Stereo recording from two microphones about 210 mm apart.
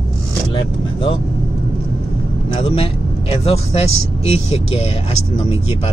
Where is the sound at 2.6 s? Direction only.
25° left (ahead or behind).